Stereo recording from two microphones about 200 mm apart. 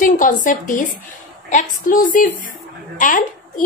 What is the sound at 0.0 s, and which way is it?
A woman's voice, 40° left (ahead or behind).